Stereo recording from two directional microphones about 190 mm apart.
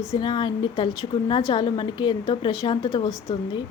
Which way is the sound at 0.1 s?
25° left (ahead or behind).